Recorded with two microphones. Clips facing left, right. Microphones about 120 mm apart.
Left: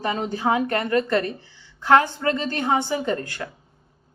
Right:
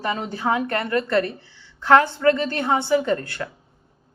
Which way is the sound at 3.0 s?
25° left (ahead or behind).